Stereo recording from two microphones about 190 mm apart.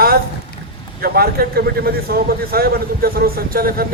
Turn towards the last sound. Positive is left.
turn(degrees=-50)  # may be behind; listen again after turning